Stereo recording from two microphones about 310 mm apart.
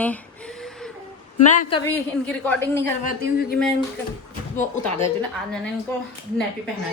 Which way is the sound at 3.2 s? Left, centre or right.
Left.